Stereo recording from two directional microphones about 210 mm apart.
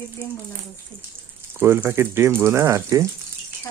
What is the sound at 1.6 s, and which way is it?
Speech, 10° right (ahead or behind).